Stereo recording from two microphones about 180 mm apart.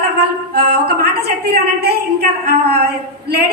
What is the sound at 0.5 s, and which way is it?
Singing, 60° right (ahead or behind).